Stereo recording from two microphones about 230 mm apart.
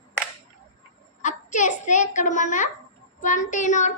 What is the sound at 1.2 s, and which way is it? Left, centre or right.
A child's voice, left.